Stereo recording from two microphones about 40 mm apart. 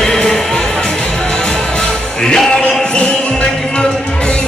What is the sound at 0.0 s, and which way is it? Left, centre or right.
Music, centre.